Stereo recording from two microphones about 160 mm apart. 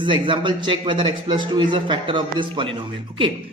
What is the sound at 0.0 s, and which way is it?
A man's voice, 30° right (ahead or behind).